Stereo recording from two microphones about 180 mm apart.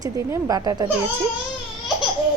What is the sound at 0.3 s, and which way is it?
Speech, 20° right (ahead or behind).